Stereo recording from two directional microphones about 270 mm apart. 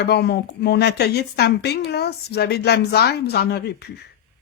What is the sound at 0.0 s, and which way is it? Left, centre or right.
Speech, left.